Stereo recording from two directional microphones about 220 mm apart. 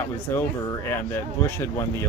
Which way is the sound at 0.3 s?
10° left (ahead or behind).